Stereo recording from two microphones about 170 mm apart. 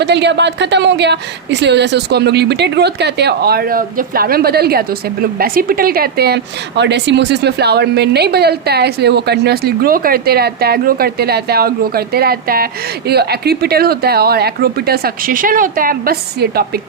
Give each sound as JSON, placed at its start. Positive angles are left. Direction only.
{"t": 0.0, "sound": "a woman's voice", "side_deg": -90}